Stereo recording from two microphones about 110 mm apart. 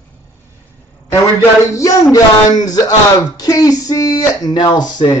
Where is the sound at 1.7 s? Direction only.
30° left (ahead or behind).